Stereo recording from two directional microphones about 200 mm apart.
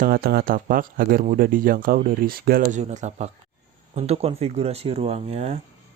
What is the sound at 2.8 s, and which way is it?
Speech, 35° right (ahead or behind).